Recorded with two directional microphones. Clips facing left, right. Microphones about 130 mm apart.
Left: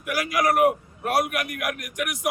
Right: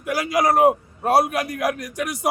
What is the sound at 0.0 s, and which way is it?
A man's voice, 25° right (ahead or behind).